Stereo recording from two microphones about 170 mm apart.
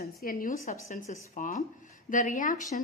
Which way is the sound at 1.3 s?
60° left (ahead or behind).